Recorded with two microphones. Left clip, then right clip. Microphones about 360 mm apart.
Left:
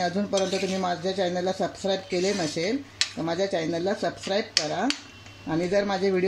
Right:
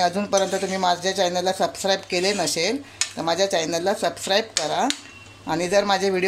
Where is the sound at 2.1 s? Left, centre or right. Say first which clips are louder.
Right 4 dB; right.